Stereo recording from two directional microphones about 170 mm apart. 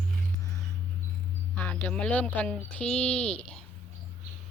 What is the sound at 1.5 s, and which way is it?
Speech, 10° left (ahead or behind).